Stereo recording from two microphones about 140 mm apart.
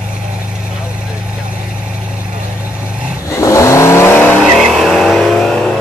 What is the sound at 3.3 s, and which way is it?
Vehicle, 20° left (ahead or behind).